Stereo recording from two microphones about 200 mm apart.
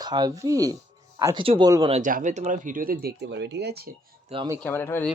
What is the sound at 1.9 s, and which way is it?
Speech, 40° right (ahead or behind).